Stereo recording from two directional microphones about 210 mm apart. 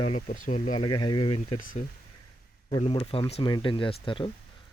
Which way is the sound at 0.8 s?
20° left (ahead or behind).